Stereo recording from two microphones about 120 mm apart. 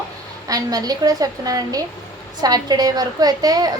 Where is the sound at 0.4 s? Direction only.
30° right (ahead or behind).